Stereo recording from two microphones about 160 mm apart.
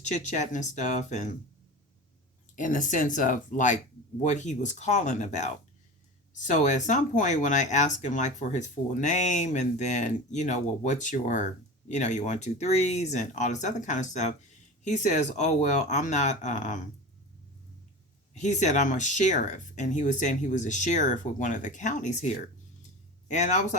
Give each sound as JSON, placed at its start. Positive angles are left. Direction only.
{"t": 0.0, "sound": "speech", "side_deg": 45}
{"t": 2.6, "sound": "speech", "side_deg": 55}
{"t": 18.3, "sound": "speech", "side_deg": 50}
{"t": 23.3, "sound": "speech", "side_deg": 50}